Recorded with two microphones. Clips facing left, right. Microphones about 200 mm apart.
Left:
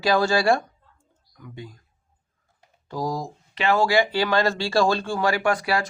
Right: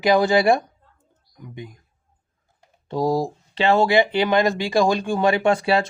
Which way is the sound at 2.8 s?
25° right (ahead or behind).